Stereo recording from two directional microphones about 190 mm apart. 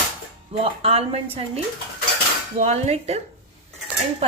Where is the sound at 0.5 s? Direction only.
30° right (ahead or behind).